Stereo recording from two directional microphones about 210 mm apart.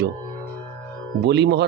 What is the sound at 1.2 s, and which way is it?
Speech, 55° right (ahead or behind).